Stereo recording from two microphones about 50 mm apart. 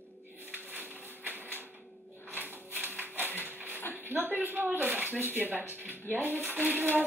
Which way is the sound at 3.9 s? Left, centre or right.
Right.